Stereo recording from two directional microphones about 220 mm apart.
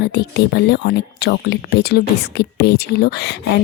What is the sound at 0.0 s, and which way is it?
Speech, 50° left (ahead or behind).